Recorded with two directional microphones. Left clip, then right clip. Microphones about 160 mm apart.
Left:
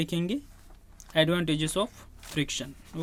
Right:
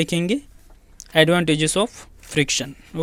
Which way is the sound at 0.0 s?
40° right (ahead or behind).